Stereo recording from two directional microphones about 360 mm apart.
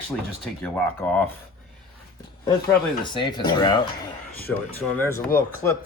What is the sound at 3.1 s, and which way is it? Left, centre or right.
Speech, centre.